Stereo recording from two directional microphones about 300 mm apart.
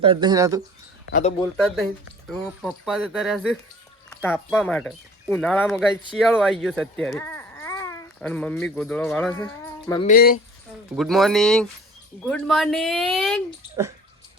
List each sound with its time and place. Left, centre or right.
0.0 s speech: centre
1.5 s speech: centre
10.1 s speech: left
10.9 s speech: centre